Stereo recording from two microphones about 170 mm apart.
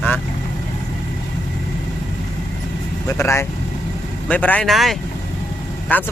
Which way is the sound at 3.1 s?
15° left (ahead or behind).